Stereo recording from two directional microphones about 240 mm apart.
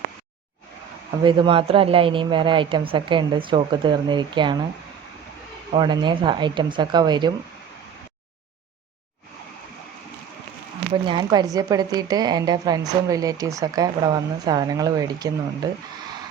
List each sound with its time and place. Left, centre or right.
1.2 s a woman's voice: centre
5.7 s a woman's voice: centre
11.0 s a woman's voice: centre